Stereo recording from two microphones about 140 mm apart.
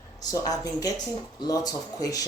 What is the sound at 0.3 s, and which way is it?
Speech, 25° left (ahead or behind).